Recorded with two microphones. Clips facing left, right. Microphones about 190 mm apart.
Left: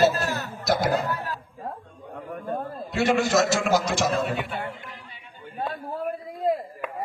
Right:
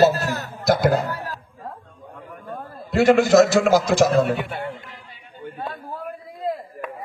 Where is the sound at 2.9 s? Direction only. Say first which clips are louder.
Right 8 dB; 55° right (ahead or behind).